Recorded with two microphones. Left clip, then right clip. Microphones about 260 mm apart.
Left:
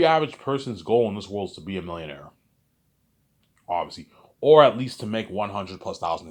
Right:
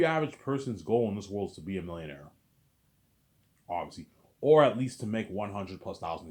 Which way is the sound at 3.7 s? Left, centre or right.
Centre.